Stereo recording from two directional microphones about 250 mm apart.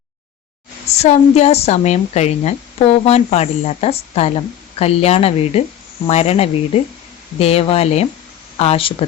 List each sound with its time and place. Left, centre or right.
0.9 s a woman's voice: left